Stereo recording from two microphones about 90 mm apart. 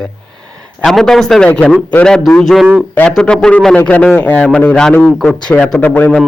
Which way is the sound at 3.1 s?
5° left (ahead or behind).